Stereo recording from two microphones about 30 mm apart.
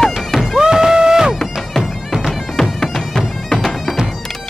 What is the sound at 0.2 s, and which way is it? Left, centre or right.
Music, centre.